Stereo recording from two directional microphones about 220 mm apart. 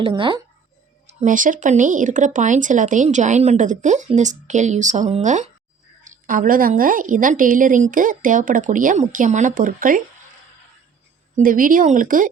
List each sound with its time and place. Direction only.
0.0 s speech: 20° right (ahead or behind)
1.2 s speech: 35° right (ahead or behind)
11.3 s speech: 40° right (ahead or behind)